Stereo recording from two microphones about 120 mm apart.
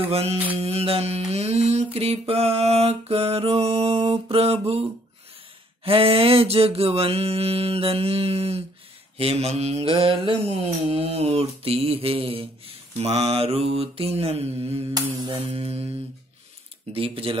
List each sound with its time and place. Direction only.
0.1 s mantra: 55° right (ahead or behind)
5.9 s mantra: 50° right (ahead or behind)
15.1 s mantra: 45° right (ahead or behind)